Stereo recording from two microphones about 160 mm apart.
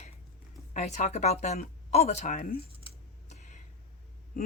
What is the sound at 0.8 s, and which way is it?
Speech, 45° left (ahead or behind).